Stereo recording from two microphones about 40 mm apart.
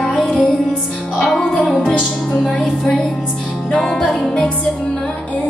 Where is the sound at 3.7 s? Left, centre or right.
Left.